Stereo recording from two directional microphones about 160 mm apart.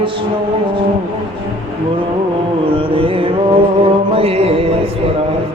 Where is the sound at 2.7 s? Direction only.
35° right (ahead or behind).